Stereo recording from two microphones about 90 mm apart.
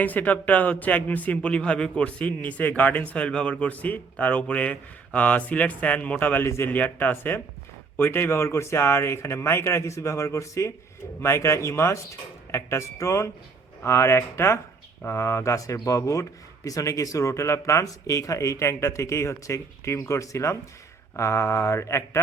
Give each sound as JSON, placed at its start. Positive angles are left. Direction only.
{"t": 0.0, "sound": "a man's voice", "side_deg": 15}